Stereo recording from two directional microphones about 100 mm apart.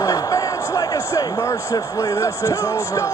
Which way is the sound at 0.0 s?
35° left (ahead or behind).